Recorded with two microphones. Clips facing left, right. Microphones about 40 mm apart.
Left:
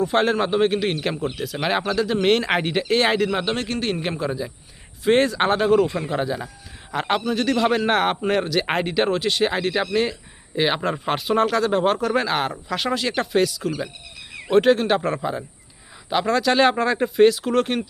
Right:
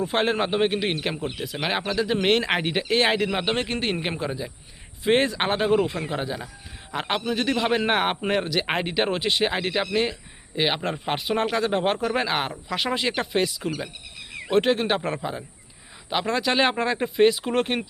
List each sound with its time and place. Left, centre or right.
0.0 s speech: centre
3.2 s a man's voice: right
4.2 s a man's voice: centre